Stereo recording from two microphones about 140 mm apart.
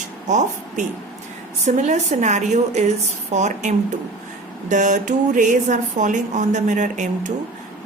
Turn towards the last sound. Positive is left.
turn(degrees=-60)  # may be behind; listen again after turning